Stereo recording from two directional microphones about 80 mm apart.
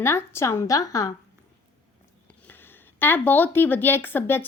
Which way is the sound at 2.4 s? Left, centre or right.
Left.